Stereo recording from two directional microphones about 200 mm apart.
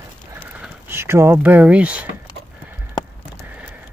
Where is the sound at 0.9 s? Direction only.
10° right (ahead or behind).